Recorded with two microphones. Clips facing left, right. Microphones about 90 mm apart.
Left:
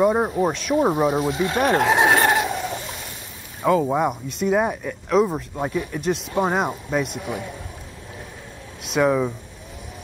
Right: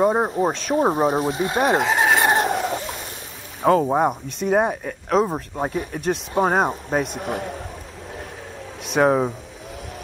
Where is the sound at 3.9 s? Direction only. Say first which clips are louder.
Right 2 dB; 35° right (ahead or behind).